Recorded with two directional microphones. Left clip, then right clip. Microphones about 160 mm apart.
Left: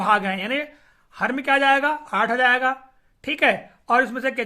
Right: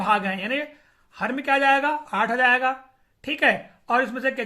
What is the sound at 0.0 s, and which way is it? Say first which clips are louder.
Speech: left 2 dB; 30° left (ahead or behind).